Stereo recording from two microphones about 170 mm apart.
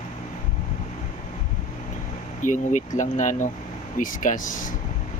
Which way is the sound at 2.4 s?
50° left (ahead or behind).